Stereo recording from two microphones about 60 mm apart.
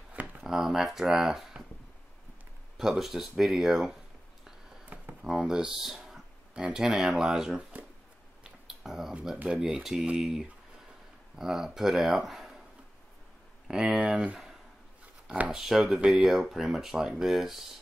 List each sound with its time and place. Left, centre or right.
0.1 s a sound: right
0.5 s speech: centre
2.8 s speech: centre
5.2 s a sound: centre
6.7 s speech: centre
7.7 s a sound: right
8.5 s finger snapping: centre
9.5 s speech: right
11.3 s speech: centre
13.7 s speech: centre
13.9 s speech: right
15.5 s speech: centre